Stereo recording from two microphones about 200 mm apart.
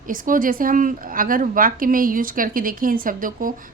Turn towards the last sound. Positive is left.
turn(degrees=-45)  # may be behind; listen again after turning